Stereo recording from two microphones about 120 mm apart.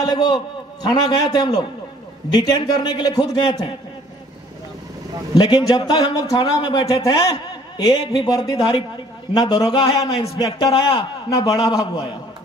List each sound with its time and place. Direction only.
0.0 s a man's voice: 35° left (ahead or behind)
5.3 s a man's voice: 35° left (ahead or behind)
10.3 s a man's voice: 30° left (ahead or behind)
10.7 s a man's voice: 45° left (ahead or behind)
11.2 s a man's voice: 30° left (ahead or behind)